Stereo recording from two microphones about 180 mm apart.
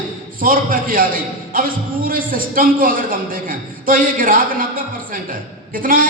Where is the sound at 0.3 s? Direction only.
50° right (ahead or behind).